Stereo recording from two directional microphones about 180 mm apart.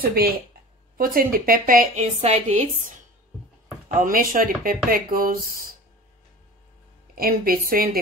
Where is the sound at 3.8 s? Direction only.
50° right (ahead or behind).